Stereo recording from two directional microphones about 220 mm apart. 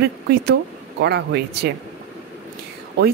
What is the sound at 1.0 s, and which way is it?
Speech, 50° right (ahead or behind).